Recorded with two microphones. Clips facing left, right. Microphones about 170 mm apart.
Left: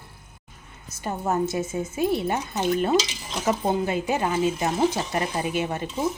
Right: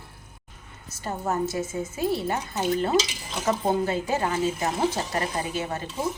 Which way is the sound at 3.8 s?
15° left (ahead or behind).